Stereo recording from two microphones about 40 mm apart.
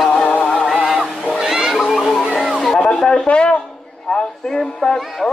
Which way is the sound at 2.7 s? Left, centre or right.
Centre.